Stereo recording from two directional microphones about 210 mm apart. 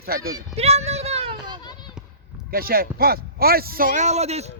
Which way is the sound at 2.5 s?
45° right (ahead or behind).